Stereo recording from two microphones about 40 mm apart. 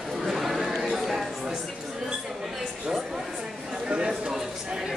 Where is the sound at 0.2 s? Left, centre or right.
Centre.